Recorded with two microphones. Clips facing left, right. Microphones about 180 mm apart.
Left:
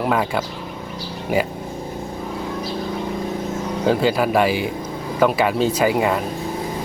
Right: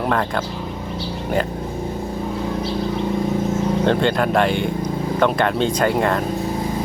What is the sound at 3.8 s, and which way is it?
Speech, 5° left (ahead or behind).